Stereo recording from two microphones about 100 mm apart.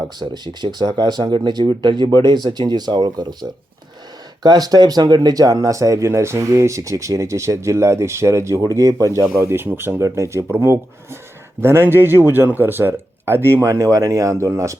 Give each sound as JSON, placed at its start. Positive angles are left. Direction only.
{"t": 0.2, "sound": "speech", "side_deg": -45}
{"t": 9.4, "sound": "speech", "side_deg": -25}